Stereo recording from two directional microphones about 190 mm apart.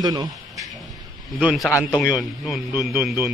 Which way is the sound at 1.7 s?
15° left (ahead or behind).